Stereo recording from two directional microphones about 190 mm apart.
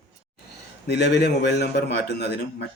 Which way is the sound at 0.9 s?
60° left (ahead or behind).